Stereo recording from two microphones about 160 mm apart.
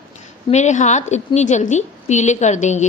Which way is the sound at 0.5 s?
45° left (ahead or behind).